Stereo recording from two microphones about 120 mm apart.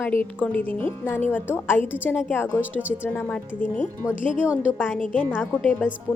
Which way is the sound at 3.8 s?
90° left.